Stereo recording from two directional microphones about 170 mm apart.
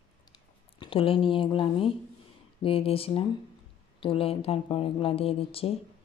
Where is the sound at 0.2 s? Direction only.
25° left (ahead or behind).